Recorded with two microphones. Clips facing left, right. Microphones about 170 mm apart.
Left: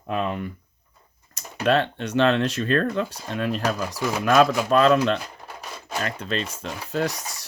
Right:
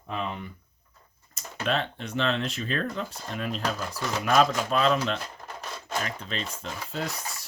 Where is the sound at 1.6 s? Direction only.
75° left (ahead or behind).